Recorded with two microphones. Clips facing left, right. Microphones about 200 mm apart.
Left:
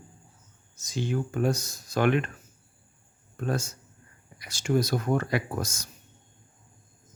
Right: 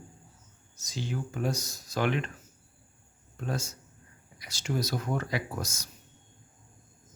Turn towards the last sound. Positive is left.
turn(degrees=55)  # may be behind; listen again after turning